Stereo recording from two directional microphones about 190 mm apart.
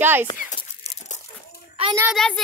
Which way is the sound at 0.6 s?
35° left (ahead or behind).